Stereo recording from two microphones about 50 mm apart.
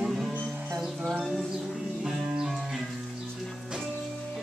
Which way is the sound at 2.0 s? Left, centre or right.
Centre.